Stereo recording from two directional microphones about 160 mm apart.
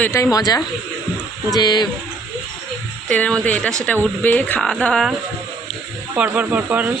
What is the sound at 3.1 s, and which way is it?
Speech, 5° left (ahead or behind).